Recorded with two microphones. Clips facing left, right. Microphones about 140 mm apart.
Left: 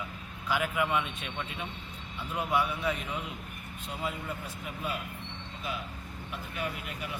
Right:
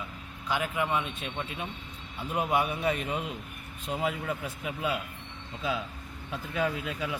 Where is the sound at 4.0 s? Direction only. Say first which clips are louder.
Right 4 dB; 90° right.